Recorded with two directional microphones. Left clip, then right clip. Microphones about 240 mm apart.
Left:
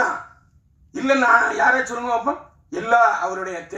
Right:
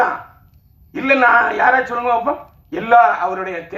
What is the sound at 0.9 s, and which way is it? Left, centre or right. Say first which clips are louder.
A man's voice: right 4 dB; left.